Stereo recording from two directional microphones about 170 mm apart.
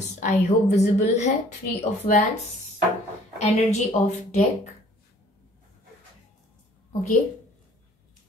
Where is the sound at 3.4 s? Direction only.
40° left (ahead or behind).